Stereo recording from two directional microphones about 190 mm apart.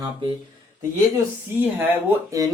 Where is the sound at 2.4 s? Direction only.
15° right (ahead or behind).